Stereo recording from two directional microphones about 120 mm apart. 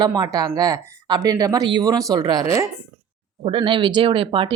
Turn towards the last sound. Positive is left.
turn(degrees=-45)  # may be behind; listen again after turning